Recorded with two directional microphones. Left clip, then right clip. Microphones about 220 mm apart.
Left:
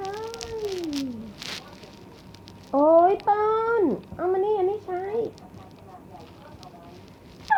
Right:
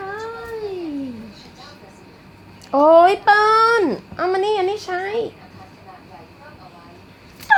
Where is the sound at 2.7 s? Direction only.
35° right (ahead or behind).